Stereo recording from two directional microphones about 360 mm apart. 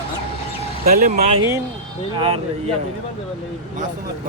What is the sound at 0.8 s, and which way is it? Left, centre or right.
Speech, right.